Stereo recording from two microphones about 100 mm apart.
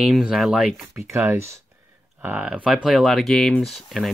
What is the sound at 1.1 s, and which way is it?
Speech, 25° right (ahead or behind).